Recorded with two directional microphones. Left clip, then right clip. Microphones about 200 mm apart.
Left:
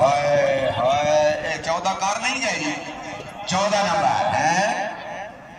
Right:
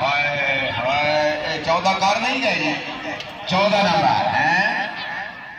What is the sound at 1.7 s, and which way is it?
Speech, 20° right (ahead or behind).